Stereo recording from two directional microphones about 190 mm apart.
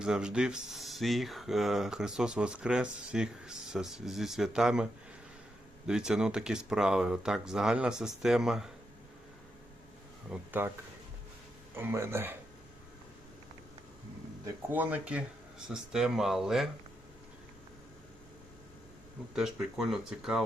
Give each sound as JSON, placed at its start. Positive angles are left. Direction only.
{"t": 0.0, "sound": "speech", "side_deg": -5}
{"t": 5.9, "sound": "speech", "side_deg": -5}
{"t": 11.7, "sound": "speech", "side_deg": -10}
{"t": 14.4, "sound": "speech", "side_deg": -10}
{"t": 19.4, "sound": "speech", "side_deg": 0}